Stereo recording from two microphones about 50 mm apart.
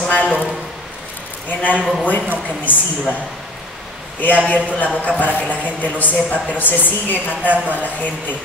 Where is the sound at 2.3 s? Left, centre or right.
Left.